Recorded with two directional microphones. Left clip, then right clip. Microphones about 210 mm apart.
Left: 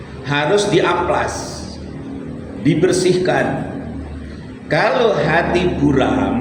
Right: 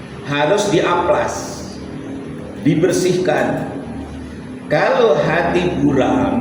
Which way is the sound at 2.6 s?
40° left (ahead or behind).